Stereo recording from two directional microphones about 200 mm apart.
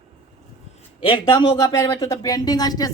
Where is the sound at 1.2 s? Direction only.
20° left (ahead or behind).